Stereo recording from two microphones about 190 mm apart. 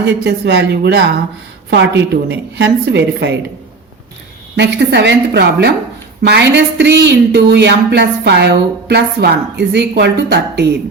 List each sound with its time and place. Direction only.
0.0 s speech: 65° right (ahead or behind)
4.5 s speech: 65° right (ahead or behind)